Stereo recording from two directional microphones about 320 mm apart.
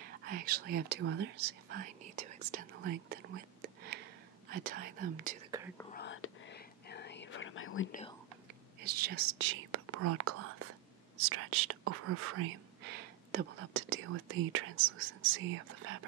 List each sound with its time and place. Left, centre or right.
0.2 s speech: right
3.6 s a sound: right
4.5 s speech: right
5.9 s whispering: left
8.8 s speech: right